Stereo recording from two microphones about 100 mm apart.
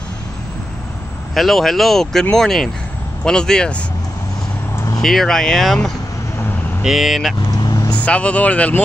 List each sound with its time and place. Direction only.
1.3 s speech: centre (ahead or behind)
4.7 s vehicle: 30° left (ahead or behind)
5.0 s speech: 5° left (ahead or behind)
6.8 s speech: 5° right (ahead or behind)
7.5 s vehicle: 40° left (ahead or behind)
7.9 s speech: 10° left (ahead or behind)